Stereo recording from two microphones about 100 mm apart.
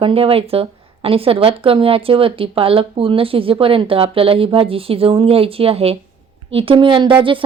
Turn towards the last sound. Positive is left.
turn(degrees=-55)  # may be behind; listen again after turning